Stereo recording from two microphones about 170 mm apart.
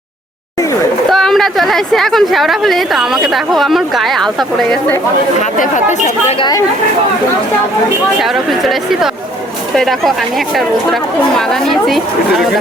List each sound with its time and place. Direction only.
1.1 s a woman's voice: centre (ahead or behind)
5.4 s speech: 45° left (ahead or behind)
8.2 s a woman's voice: centre (ahead or behind)